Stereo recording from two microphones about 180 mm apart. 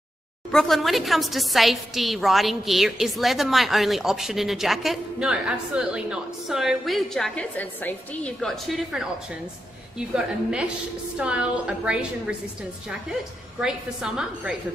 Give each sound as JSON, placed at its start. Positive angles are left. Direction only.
{"t": 0.5, "sound": "a woman's voice", "side_deg": 0}
{"t": 13.6, "sound": "a woman's voice", "side_deg": -5}